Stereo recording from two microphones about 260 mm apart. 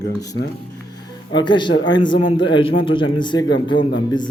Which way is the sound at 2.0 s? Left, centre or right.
Centre.